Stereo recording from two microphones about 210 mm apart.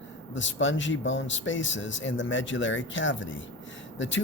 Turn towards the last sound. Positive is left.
turn(degrees=60)  # may be behind; listen again after turning